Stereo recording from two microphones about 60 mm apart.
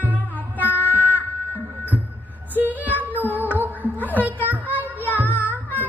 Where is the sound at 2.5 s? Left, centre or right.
Right.